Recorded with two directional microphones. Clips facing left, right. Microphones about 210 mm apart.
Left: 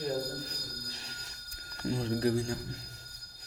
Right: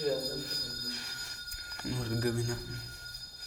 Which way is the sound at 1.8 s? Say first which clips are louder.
Left 4 dB; 30° left (ahead or behind).